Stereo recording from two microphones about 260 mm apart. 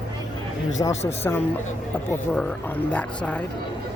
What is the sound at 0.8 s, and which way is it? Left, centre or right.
Speech, centre.